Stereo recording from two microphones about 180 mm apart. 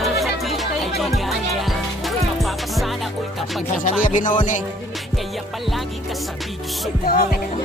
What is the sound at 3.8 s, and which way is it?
Music, 45° left (ahead or behind).